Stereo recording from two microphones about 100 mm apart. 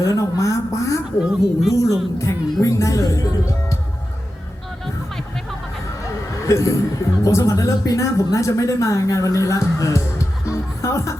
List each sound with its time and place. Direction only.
0.0 s speech: 30° left (ahead or behind)
1.2 s speech: 5° right (ahead or behind)
1.7 s speech: 30° left (ahead or behind)
2.1 s music: 30° left (ahead or behind)
6.4 s speech: 30° left (ahead or behind)